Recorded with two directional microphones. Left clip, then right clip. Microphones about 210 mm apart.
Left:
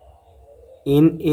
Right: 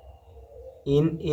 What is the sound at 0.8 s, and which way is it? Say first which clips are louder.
Speech: left 8 dB; 35° left (ahead or behind).